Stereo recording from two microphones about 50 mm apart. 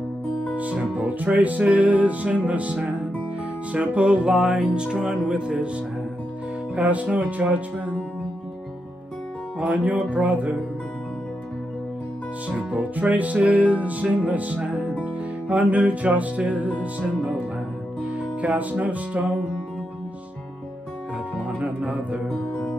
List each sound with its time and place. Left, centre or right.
0.3 s music: left
0.6 s music: right
6.7 s speech: right
9.6 s speech: right
12.7 s music: right
18.0 s music: right
21.6 s speech: right
22.5 s music: left